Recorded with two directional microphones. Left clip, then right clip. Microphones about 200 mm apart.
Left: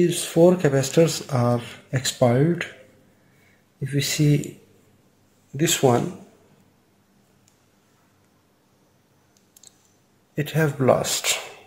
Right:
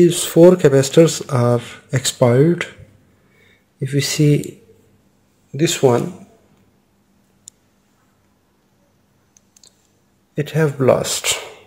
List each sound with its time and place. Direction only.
0.0 s speech: 40° right (ahead or behind)
3.8 s speech: 35° right (ahead or behind)
5.6 s speech: 20° right (ahead or behind)
7.5 s a sound: 60° right (ahead or behind)
10.3 s speech: 20° right (ahead or behind)